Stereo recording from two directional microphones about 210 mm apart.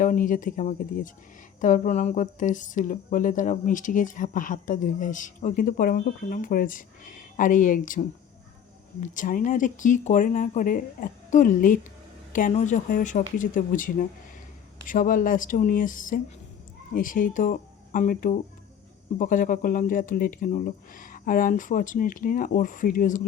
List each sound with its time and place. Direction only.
0.0 s speech: 40° left (ahead or behind)